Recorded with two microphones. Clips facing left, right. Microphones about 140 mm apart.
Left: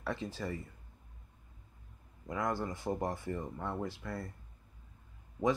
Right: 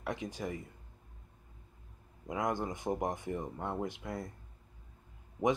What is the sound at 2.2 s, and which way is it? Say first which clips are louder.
Speech: right 1 dB; 20° right (ahead or behind).